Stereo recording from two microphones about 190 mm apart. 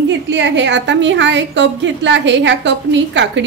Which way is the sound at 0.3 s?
70° right (ahead or behind).